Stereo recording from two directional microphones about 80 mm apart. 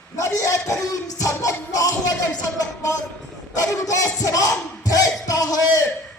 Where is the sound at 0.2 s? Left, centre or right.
Left.